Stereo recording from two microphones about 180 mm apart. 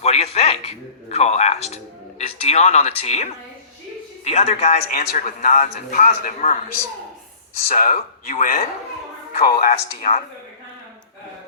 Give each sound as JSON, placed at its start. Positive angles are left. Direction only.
{"t": 0.0, "sound": "a man's voice", "side_deg": 35}
{"t": 4.9, "sound": "a man's voice", "side_deg": 45}
{"t": 7.7, "sound": "a man's voice", "side_deg": 45}